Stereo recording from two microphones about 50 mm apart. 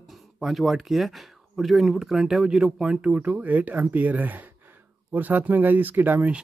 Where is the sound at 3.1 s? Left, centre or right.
Right.